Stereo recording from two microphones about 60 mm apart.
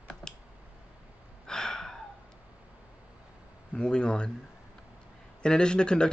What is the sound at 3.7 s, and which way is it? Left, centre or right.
Speech, centre.